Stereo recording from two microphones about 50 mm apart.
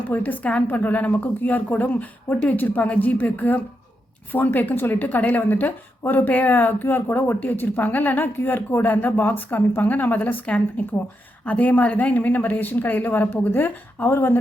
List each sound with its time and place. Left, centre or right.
0.1 s a woman's voice: left
14.1 s speech: left